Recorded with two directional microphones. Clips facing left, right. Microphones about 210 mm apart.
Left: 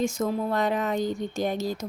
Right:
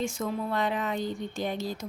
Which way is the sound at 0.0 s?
40° left (ahead or behind).